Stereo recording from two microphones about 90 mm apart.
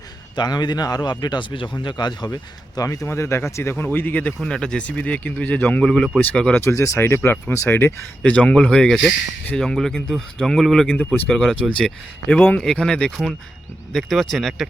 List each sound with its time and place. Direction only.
0.3 s speech: 50° left (ahead or behind)
3.1 s speech: 30° left (ahead or behind); by 6.6 s 10° left (ahead or behind)
6.6 s speech: 30° left (ahead or behind)
8.2 s speech: 10° left (ahead or behind)